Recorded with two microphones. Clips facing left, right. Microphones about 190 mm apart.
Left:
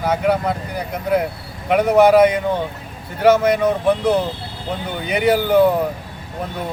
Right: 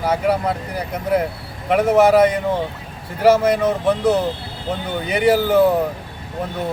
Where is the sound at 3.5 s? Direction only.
5° right (ahead or behind).